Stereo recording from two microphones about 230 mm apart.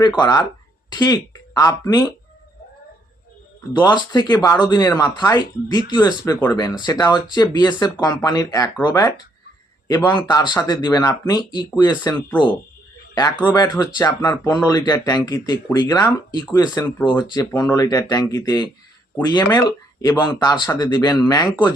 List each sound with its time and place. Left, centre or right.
0.2 s speech: centre
3.7 s speech: centre